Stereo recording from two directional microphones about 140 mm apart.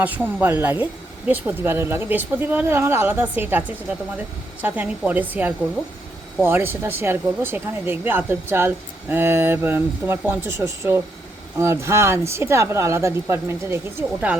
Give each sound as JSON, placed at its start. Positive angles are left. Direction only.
{"t": 0.0, "sound": "speech", "side_deg": -10}